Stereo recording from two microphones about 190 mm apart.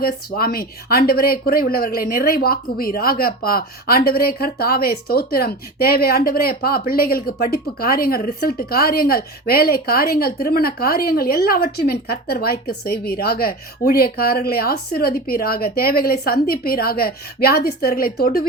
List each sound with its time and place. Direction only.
0.0 s speech: 55° left (ahead or behind)